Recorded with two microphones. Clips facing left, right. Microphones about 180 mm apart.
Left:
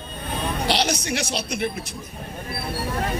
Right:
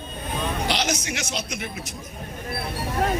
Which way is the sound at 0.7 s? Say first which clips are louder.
Left 3 dB; 35° left (ahead or behind).